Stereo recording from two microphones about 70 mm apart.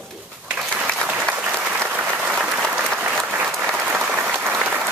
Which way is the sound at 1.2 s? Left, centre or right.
Right.